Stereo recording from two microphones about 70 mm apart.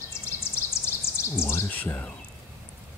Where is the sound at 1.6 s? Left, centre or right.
Left.